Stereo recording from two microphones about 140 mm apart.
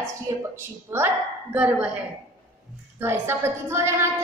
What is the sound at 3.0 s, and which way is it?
A woman's voice, 15° right (ahead or behind).